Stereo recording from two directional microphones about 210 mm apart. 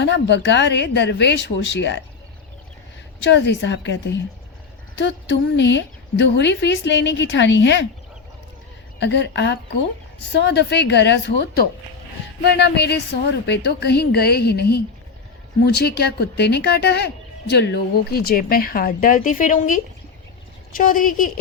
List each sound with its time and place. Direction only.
0.0 s a woman's voice: 55° left (ahead or behind)
3.2 s a woman's voice: 55° left (ahead or behind)
9.0 s a woman's voice: 55° left (ahead or behind)